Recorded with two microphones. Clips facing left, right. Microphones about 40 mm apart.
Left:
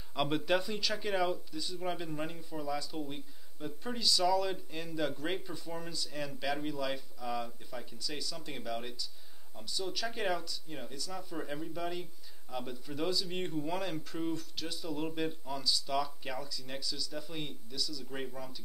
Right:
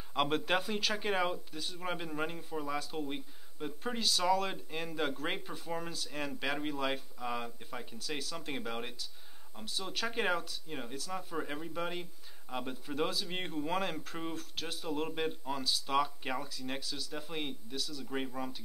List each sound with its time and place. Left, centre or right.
0.1 s speech: right
9.9 s speech: right
11.3 s speech: right
18.1 s speech: right